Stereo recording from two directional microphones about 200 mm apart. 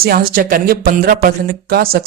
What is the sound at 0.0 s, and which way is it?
Speech, 45° right (ahead or behind).